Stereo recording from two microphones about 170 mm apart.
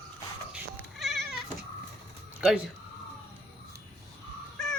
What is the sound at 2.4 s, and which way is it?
Speech, 5° right (ahead or behind).